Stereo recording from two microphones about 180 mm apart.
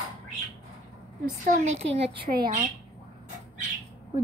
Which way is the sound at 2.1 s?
60° right (ahead or behind).